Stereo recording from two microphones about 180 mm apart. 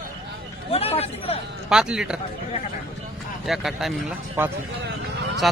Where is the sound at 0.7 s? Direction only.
35° left (ahead or behind).